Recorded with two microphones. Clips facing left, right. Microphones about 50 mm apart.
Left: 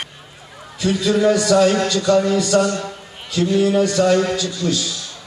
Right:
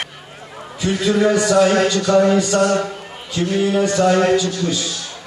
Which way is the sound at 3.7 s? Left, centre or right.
Right.